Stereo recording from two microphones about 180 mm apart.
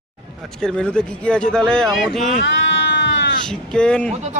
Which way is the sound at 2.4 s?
80° left.